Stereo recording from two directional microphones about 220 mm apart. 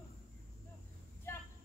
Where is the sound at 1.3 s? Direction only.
10° left (ahead or behind).